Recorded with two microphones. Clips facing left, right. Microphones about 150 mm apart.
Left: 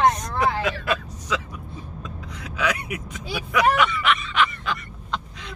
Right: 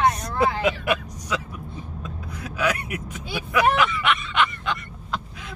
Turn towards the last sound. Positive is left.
turn(degrees=0)  # may be behind; listen again after turning